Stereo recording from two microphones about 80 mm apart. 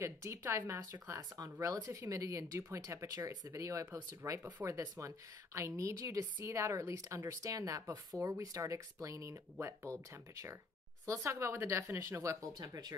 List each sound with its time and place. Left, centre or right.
0.0 s a woman's voice: right
12.5 s speech: right